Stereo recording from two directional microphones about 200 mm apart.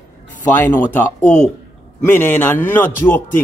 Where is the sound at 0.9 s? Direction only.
10° left (ahead or behind).